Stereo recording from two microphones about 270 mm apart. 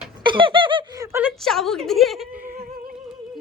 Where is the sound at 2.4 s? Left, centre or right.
Right.